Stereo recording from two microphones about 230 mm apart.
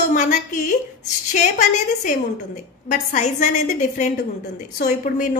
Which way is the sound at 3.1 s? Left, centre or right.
Left.